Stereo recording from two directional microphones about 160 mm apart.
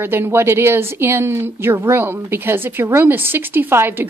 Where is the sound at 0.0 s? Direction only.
15° right (ahead or behind).